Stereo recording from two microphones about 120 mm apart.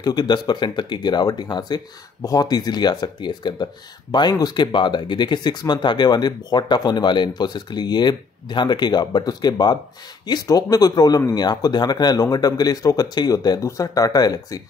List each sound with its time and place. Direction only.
0.0 s speech: 35° left (ahead or behind)